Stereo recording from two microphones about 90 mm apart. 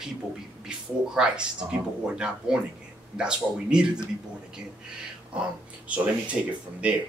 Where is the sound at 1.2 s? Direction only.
10° right (ahead or behind).